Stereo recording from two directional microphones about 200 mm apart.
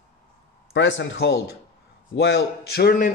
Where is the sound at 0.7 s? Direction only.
65° left (ahead or behind); by 3.1 s 45° left (ahead or behind).